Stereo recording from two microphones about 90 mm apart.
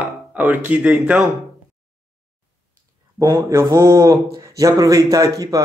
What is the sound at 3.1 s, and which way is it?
Speech, 40° right (ahead or behind).